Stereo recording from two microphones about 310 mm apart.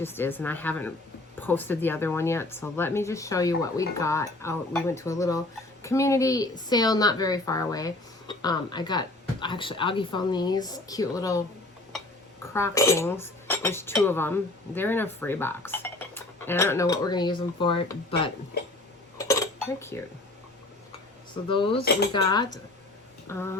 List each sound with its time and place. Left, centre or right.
0.0 s speech: centre
12.5 s speech: centre
19.1 s dishes: centre
21.5 s speech: centre